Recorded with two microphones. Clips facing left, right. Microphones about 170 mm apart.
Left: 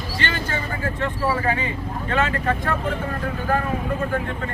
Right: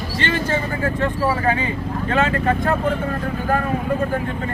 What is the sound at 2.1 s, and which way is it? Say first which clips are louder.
Speech: right 3 dB; 35° right (ahead or behind).